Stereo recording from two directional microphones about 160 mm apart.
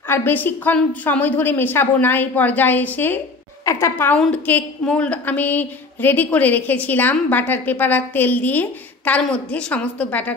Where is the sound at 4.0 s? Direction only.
10° left (ahead or behind).